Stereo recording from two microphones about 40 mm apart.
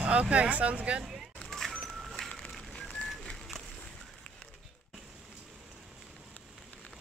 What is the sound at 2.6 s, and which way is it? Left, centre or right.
Bird, centre.